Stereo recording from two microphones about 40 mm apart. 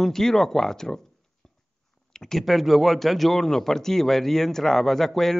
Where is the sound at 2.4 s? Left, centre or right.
Centre.